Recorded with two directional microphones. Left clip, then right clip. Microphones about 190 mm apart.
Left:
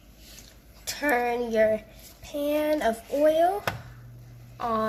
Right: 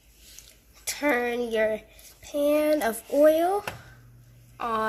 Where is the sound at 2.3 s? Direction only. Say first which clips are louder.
Right 3 dB; 40° right (ahead or behind).